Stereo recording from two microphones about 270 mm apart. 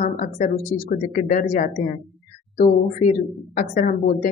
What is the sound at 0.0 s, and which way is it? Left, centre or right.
Speech, left.